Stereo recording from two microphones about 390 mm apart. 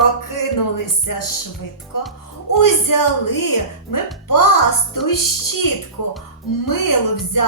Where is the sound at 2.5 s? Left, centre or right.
Left.